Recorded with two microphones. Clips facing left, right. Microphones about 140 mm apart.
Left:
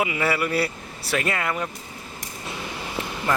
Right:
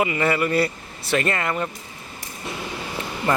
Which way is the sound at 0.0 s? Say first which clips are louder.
Right 3 dB; 5° left (ahead or behind).